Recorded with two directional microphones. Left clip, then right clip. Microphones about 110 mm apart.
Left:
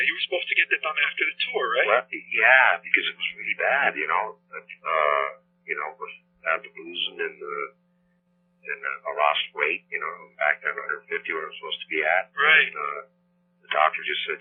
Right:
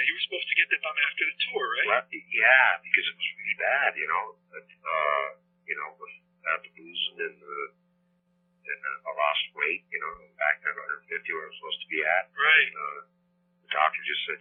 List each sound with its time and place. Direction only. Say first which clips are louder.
0.0 s a man's voice: left 3 dB; 30° left (ahead or behind)